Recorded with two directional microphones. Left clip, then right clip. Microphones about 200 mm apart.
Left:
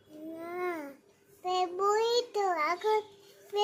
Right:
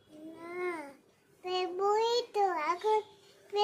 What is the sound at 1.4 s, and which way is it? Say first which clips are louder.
Child singing: left 2 dB; 10° left (ahead or behind).